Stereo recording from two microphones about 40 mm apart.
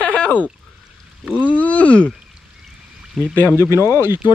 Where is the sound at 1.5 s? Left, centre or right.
Left.